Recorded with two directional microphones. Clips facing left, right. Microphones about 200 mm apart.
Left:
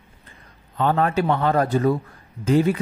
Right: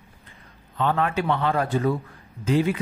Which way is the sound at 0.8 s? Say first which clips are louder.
Left 3 dB; 40° left (ahead or behind).